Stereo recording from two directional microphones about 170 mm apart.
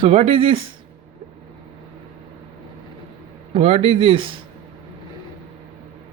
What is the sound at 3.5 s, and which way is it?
Speech, 35° right (ahead or behind).